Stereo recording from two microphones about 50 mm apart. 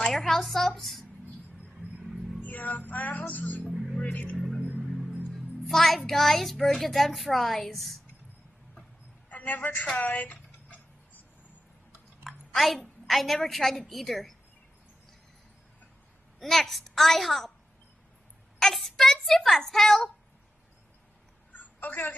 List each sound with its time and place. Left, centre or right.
0.0 s a woman's voice: centre
2.4 s music: left
3.6 s music: centre
4.1 s music: left
4.6 s music: centre
5.3 s a child's voice: centre
9.3 s a sound: left
12.2 s a woman's voice: centre
16.3 s a child's voice: centre
18.6 s a child's voice: centre
21.5 s a sound: left